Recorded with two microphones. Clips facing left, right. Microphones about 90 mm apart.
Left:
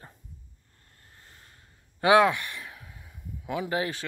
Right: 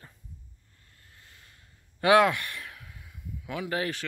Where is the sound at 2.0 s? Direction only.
20° left (ahead or behind).